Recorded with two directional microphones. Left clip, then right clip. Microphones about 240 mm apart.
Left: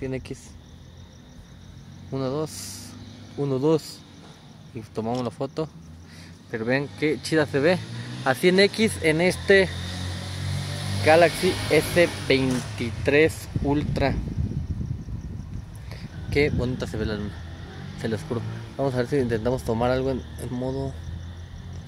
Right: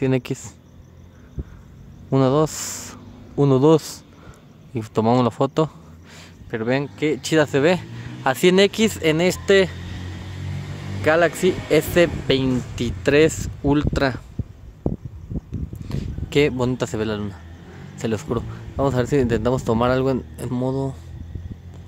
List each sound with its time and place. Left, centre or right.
0.0 s speech: right
2.0 s speech: right
11.1 s speech: right
15.9 s speech: right